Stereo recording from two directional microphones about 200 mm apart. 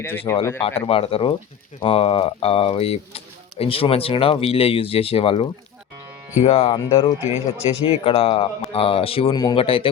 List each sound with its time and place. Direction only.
0.0 s speech: 10° left (ahead or behind)
0.6 s speech: 30° left (ahead or behind)